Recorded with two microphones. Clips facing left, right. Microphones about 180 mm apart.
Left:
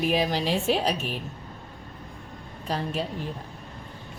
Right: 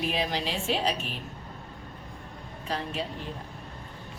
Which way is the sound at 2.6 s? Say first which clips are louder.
Left 4 dB; 40° left (ahead or behind).